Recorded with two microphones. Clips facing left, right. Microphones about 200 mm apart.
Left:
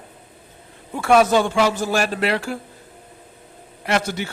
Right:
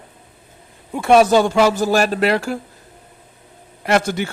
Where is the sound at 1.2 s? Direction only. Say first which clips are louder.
Right 4 dB; 35° right (ahead or behind).